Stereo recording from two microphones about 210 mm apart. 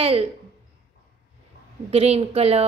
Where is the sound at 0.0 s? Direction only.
30° right (ahead or behind).